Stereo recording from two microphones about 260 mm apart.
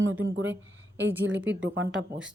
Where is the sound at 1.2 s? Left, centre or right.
Right.